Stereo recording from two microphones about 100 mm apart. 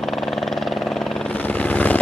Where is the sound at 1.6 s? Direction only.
15° left (ahead or behind).